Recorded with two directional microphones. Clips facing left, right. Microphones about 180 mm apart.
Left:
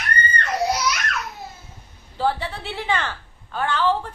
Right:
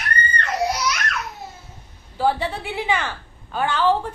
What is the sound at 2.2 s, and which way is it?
A woman's voice, 15° right (ahead or behind).